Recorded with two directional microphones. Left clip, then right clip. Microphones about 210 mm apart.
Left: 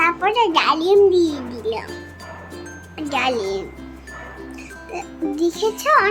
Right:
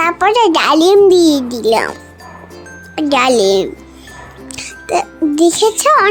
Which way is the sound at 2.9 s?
45° right (ahead or behind).